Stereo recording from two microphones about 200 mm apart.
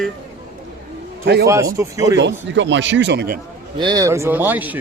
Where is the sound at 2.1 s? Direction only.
60° right (ahead or behind).